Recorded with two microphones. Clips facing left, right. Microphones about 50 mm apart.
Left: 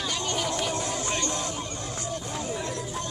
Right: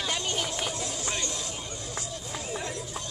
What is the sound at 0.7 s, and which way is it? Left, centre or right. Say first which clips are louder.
Music: left 4 dB; left.